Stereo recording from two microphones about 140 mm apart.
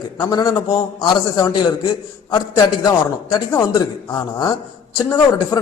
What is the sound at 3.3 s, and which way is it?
Speech, 30° left (ahead or behind).